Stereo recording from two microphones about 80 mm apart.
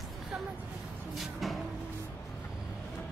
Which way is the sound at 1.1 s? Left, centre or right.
Centre.